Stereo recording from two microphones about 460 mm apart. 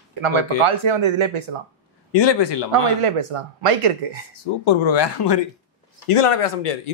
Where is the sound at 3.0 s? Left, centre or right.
Right.